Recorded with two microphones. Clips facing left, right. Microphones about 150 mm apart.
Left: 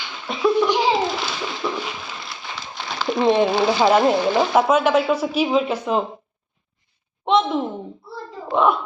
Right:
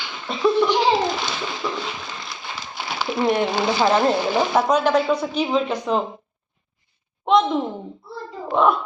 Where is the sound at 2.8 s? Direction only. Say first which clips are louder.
Left 2 dB; 5° right (ahead or behind).